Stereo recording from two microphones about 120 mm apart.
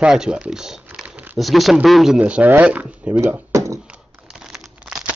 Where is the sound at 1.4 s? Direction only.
Centre (ahead or behind).